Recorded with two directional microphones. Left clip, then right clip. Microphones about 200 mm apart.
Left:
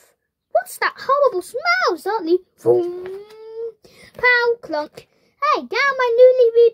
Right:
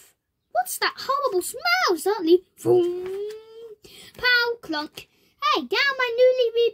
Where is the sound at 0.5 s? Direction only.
15° right (ahead or behind).